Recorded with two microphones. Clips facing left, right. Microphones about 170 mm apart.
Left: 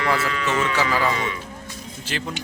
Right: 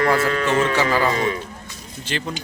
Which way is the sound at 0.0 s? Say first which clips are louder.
Right 5 dB; 40° right (ahead or behind).